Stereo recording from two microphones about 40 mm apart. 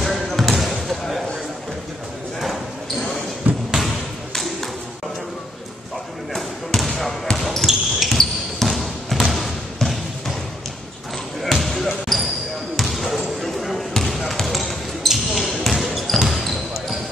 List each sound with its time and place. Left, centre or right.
0.0 s basketball bounce: centre
3.4 s basketball bounce: right
6.3 s basketball bounce: centre
7.3 s a sound: centre
11.4 s basketball bounce: centre